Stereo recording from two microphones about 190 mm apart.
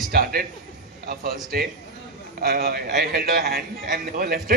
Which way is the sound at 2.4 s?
55° right (ahead or behind).